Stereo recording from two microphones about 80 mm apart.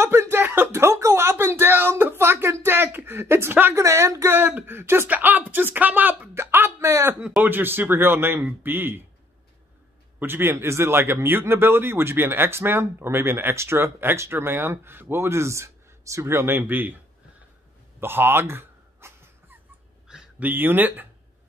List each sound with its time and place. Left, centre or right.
0.0 s speech: right
3.8 s a man's voice: right
7.2 s speech: centre
7.4 s a man's voice: right
10.1 s a man's voice: right
18.0 s a sound: right
20.3 s a man's voice: right